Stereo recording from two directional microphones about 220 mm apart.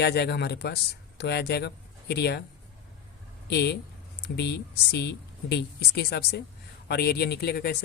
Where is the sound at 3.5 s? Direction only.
50° left (ahead or behind).